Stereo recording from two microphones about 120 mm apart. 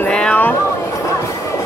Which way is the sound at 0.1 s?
10° left (ahead or behind).